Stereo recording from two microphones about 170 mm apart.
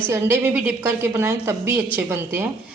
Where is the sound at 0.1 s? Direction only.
15° right (ahead or behind).